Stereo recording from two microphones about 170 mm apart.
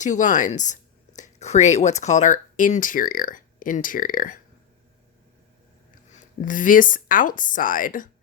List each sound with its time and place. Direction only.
0.0 s speech: 45° left (ahead or behind)
5.9 s speech: 50° left (ahead or behind)